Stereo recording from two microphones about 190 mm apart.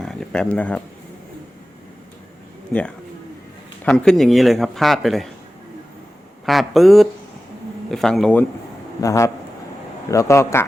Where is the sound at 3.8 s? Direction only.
5° left (ahead or behind).